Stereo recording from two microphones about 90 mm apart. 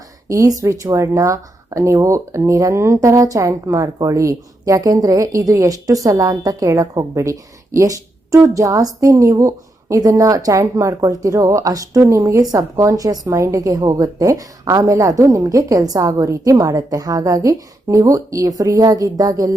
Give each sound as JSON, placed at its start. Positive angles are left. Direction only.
{"t": 0.3, "sound": "speech", "side_deg": -35}